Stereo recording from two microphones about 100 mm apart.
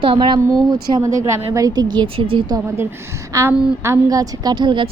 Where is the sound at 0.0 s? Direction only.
55° right (ahead or behind).